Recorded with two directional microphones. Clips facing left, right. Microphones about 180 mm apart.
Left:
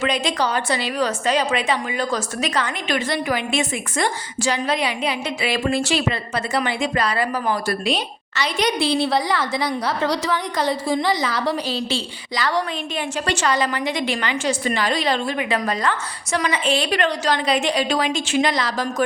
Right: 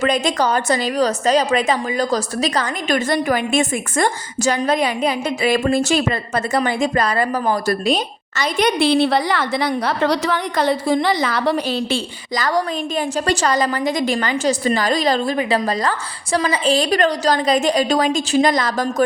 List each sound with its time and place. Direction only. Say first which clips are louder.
0.0 s a woman's voice: right 4 dB; 45° right (ahead or behind)
12.4 s a woman's voice: right 3 dB; 40° right (ahead or behind)